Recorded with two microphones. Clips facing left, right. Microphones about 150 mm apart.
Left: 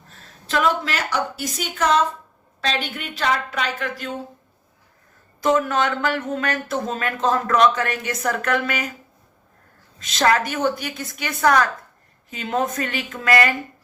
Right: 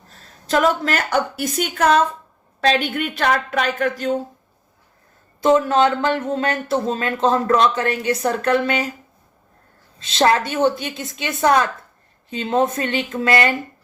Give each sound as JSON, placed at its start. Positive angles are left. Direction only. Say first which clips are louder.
{"t": 0.1, "sound": "a woman's voice", "louder": "right 5 dB", "side_deg": -40}
{"t": 5.4, "sound": "speech", "louder": "right 4 dB", "side_deg": -30}
{"t": 10.0, "sound": "speech", "louder": "right 2 dB", "side_deg": -30}